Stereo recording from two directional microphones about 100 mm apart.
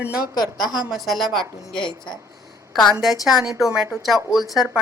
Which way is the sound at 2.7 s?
Centre (ahead or behind).